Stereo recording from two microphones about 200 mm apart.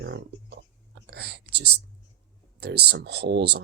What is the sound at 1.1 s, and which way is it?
Speech, 55° right (ahead or behind).